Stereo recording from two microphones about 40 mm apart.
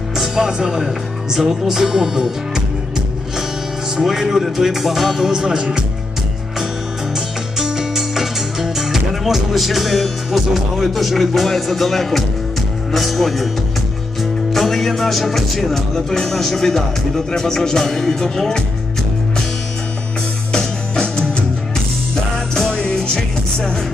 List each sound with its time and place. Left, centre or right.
0.3 s speech: centre
4.0 s speech: centre
7.2 s music: centre
12.9 s speech: centre
14.2 s music: centre
16.0 s speech: centre
20.5 s music: centre
22.7 s music: left